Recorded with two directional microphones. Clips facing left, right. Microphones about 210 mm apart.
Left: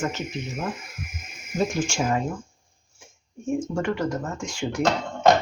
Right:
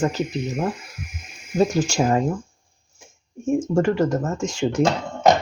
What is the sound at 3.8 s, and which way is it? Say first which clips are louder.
Speech: right 6 dB; 35° right (ahead or behind).